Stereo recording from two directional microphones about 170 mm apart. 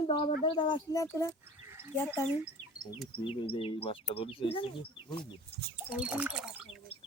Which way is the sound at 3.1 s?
30° left (ahead or behind).